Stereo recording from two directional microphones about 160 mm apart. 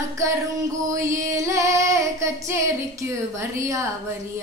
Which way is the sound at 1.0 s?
20° right (ahead or behind).